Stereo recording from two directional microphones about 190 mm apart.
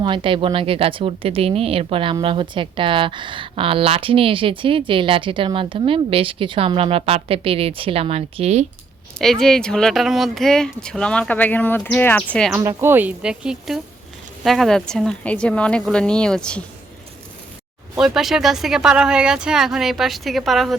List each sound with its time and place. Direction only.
0.0 s a woman's voice: 25° right (ahead or behind)
9.1 s speech: centre (ahead or behind)
12.5 s speech: 15° right (ahead or behind); by 16.6 s 5° left (ahead or behind)
17.9 s speech: 5° right (ahead or behind)